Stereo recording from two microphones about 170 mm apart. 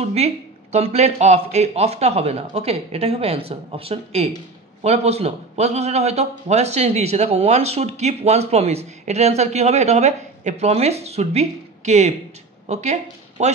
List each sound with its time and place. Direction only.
0.0 s a man's voice: 40° right (ahead or behind)